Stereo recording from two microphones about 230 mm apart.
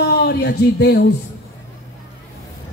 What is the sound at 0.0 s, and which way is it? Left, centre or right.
Speech, left.